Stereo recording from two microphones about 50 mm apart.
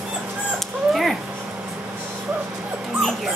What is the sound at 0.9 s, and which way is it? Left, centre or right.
Cat, centre.